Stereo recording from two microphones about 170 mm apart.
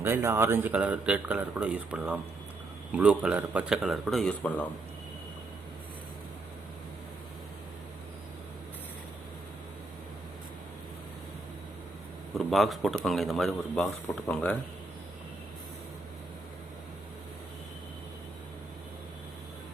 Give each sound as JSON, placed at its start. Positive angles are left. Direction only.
{"t": 0.0, "sound": "speech", "side_deg": -15}
{"t": 12.3, "sound": "speech", "side_deg": 0}